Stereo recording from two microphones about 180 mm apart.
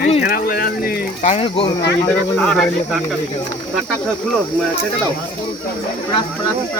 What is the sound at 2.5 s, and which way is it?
Speech, 5° left (ahead or behind).